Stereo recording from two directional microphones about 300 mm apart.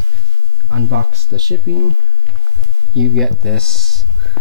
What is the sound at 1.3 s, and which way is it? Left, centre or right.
Speech, centre.